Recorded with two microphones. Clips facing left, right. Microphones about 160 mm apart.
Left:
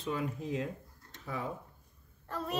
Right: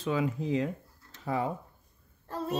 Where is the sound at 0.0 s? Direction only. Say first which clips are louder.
Right 6 dB; 90° right.